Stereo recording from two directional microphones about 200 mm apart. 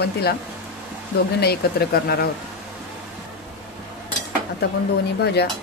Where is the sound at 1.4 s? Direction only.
55° left (ahead or behind).